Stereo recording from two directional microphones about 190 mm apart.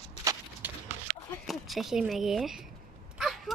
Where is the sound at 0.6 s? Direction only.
10° right (ahead or behind).